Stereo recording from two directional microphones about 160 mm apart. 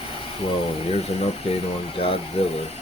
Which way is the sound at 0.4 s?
40° left (ahead or behind).